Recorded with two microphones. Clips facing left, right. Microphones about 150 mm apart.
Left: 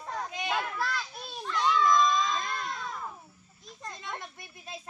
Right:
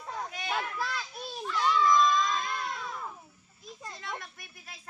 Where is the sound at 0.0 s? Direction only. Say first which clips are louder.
Left 2 dB; centre (ahead or behind).